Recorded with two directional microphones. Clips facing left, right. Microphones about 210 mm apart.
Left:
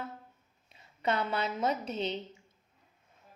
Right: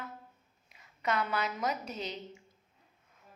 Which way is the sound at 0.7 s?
30° left (ahead or behind).